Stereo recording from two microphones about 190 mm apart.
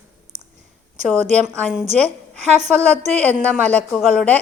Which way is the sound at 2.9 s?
35° right (ahead or behind).